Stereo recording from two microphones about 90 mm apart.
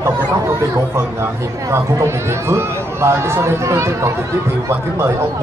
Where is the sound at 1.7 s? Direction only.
30° right (ahead or behind).